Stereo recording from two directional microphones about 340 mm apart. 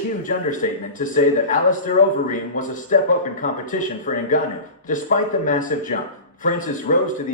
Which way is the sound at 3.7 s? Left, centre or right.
Left.